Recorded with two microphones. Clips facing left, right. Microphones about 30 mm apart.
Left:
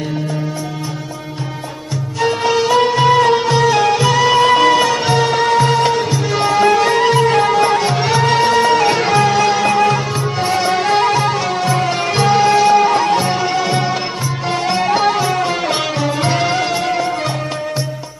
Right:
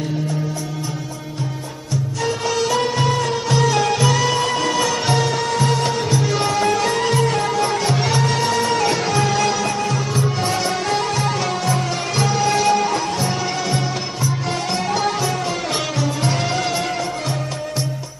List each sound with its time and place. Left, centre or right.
2.2 s music: left
3.2 s music: left
3.5 s music: centre
4.4 s music: left
5.0 s music: centre
5.3 s music: left
8.2 s music: left
9.6 s music: left
10.4 s music: centre
11.3 s music: centre
11.7 s music: left
12.5 s music: centre; by 13.4 s left
13.4 s music: left